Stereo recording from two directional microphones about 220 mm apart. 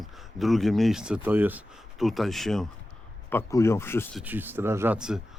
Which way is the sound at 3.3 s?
10° left (ahead or behind).